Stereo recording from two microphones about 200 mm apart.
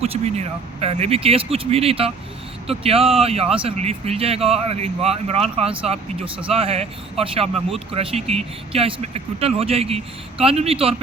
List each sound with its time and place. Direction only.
0.0 s speech: 30° right (ahead or behind)